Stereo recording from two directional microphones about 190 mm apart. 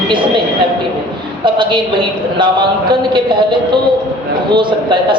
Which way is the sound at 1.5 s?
25° right (ahead or behind).